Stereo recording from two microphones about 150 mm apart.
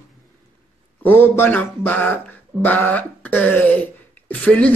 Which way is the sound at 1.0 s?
15° left (ahead or behind).